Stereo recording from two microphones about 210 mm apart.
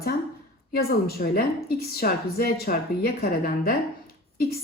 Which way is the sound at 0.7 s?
45° left (ahead or behind).